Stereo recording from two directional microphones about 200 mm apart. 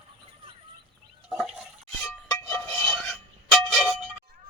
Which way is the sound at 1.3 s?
Centre (ahead or behind).